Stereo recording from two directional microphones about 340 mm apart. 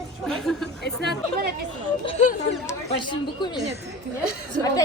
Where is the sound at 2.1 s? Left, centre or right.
Centre.